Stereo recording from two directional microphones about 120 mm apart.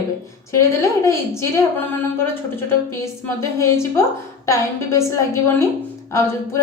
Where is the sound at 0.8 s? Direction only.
25° left (ahead or behind).